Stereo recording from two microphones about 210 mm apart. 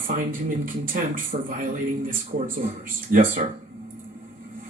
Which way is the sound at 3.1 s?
40° right (ahead or behind).